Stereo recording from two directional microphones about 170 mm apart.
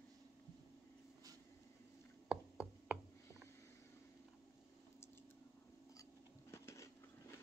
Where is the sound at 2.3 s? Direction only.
5° right (ahead or behind).